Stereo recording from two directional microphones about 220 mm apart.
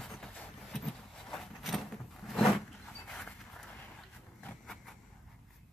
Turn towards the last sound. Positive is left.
turn(degrees=5)  # may be behind; listen again after turning